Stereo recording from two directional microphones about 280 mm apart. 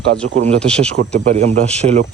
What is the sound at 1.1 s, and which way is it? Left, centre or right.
Speech, right.